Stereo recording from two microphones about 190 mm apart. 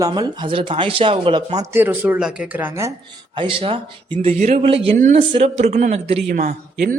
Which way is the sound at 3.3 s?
30° right (ahead or behind).